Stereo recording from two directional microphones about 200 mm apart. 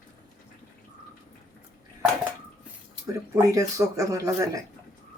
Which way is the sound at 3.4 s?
15° right (ahead or behind).